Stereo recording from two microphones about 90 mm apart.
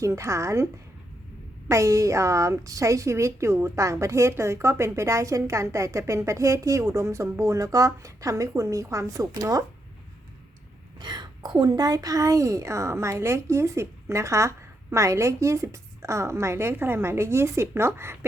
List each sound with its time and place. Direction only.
0.0 s a woman's voice: 35° right (ahead or behind)
11.0 s a woman's voice: 55° right (ahead or behind); by 18.3 s 30° right (ahead or behind)